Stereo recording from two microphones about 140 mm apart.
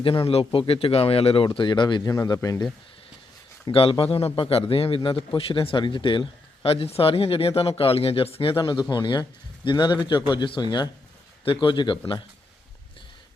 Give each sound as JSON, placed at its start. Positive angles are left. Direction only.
{"t": 0.0, "sound": "a man's voice", "side_deg": 40}
{"t": 3.7, "sound": "a man's voice", "side_deg": 40}